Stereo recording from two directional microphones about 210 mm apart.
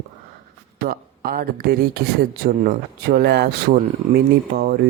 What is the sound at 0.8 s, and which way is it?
Speech, 45° right (ahead or behind).